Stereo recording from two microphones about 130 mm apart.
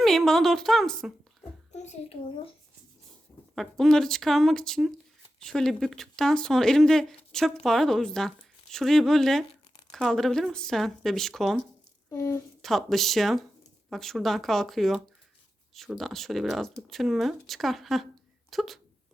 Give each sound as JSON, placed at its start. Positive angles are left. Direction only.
{"t": 0.0, "sound": "speech", "side_deg": 0}
{"t": 1.7, "sound": "a child's voice", "side_deg": 60}
{"t": 3.5, "sound": "speech", "side_deg": 0}
{"t": 12.1, "sound": "a woman's voice", "side_deg": 25}
{"t": 12.6, "sound": "speech", "side_deg": 0}